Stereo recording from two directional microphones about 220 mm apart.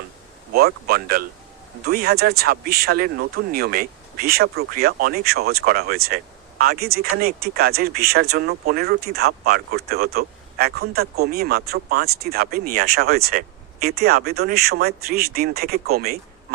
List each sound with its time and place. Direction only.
0.5 s speech: 45° right (ahead or behind)